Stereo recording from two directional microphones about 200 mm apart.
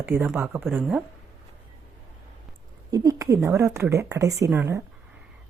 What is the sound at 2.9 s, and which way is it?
A woman's voice, 15° right (ahead or behind).